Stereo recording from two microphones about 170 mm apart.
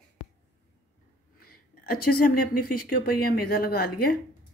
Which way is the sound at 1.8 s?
60° left (ahead or behind).